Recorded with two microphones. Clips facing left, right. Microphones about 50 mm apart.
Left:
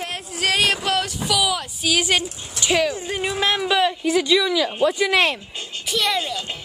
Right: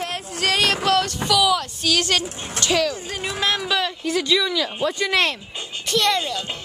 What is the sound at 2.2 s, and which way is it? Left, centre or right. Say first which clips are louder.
Speech: right 2 dB; right.